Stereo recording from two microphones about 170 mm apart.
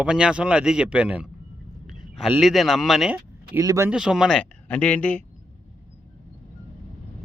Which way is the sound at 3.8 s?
5° right (ahead or behind).